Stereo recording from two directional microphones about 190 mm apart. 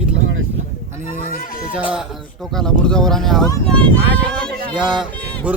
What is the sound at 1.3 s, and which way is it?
Speech, 50° left (ahead or behind).